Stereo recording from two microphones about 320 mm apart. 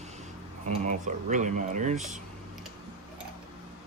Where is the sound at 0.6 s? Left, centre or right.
Right.